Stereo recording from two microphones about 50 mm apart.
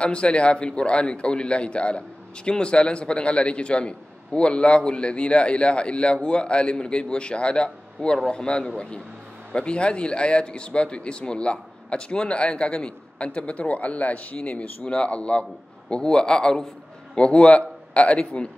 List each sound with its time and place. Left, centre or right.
0.0 s a man's voice: left